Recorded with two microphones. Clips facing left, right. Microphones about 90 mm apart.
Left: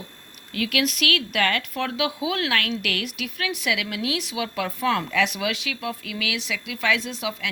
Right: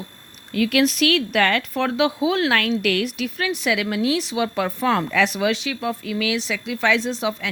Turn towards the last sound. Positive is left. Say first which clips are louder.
# right 6 dB
turn(degrees=-30)  # may be behind; listen again after turning